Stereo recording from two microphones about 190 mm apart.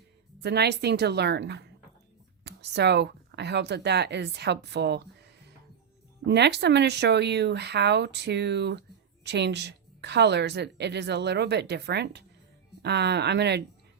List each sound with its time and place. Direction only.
0.4 s a woman's voice: 60° right (ahead or behind)
6.2 s a woman's voice: 65° right (ahead or behind)